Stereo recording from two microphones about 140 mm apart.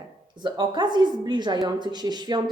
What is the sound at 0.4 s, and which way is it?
A woman's voice, 35° right (ahead or behind).